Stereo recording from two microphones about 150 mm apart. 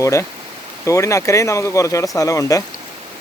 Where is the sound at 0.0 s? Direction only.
20° left (ahead or behind).